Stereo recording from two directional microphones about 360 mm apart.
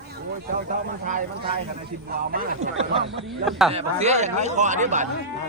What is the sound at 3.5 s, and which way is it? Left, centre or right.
Speech, centre.